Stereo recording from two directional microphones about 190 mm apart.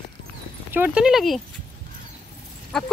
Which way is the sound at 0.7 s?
10° right (ahead or behind).